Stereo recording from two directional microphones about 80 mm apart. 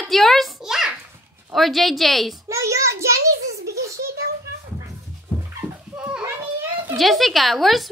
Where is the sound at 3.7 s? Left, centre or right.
Right.